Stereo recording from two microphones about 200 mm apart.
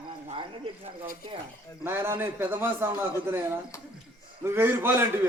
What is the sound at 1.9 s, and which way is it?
A man's voice, 10° right (ahead or behind).